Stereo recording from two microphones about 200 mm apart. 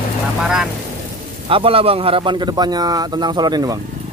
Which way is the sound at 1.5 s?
25° right (ahead or behind).